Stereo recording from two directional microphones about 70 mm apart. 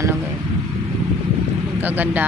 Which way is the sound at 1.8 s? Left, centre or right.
Right.